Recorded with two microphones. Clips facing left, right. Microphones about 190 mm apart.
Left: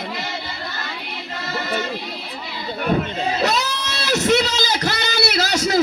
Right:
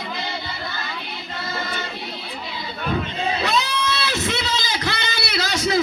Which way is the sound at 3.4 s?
40° left (ahead or behind).